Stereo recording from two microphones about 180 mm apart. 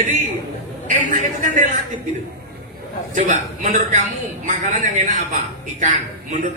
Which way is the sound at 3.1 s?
45° right (ahead or behind).